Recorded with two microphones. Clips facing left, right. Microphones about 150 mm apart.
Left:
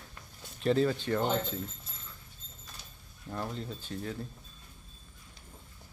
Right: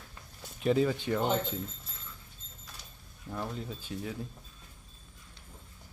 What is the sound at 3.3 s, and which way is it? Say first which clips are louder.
Speech: even; 5° left (ahead or behind).